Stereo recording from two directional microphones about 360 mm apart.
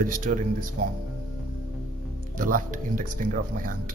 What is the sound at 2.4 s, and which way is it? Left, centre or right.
Speech, right.